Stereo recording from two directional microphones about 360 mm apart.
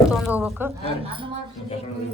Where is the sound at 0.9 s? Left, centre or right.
Centre.